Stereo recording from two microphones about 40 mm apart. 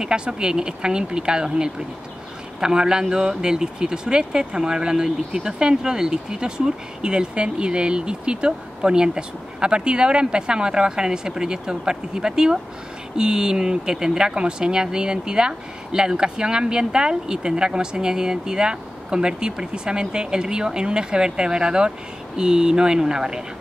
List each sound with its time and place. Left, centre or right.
0.0 s speech: right